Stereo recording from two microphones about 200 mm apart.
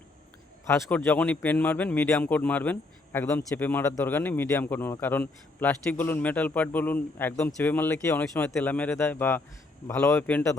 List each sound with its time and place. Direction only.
0.7 s a man's voice: 10° left (ahead or behind)